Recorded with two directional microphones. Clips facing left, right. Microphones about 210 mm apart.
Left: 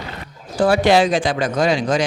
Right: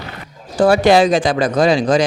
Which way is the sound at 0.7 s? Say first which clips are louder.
Right 2 dB; 45° right (ahead or behind).